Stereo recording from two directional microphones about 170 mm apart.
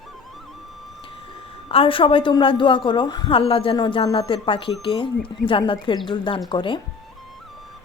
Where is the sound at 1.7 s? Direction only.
30° left (ahead or behind).